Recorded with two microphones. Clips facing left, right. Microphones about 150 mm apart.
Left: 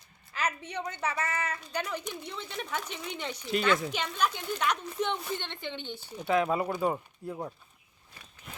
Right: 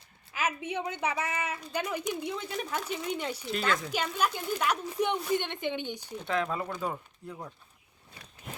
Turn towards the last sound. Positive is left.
turn(degrees=20)  # may be behind; listen again after turning